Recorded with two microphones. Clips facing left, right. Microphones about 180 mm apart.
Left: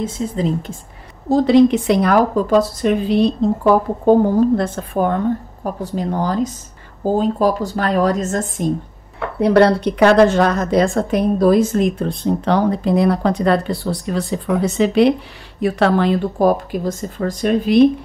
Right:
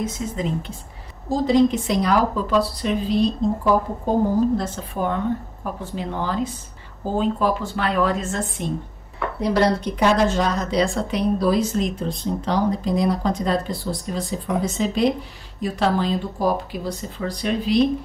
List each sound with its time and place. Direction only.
0.0 s speech: 30° left (ahead or behind)
1.3 s speech: 70° left (ahead or behind); by 8.7 s 45° left (ahead or behind)
9.4 s speech: 60° left (ahead or behind)